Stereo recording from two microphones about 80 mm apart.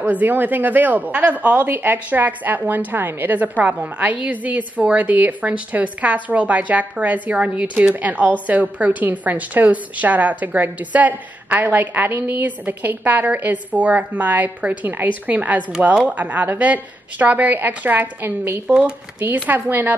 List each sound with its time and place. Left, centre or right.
0.0 s a woman's voice: right
18.7 s a woman's voice: centre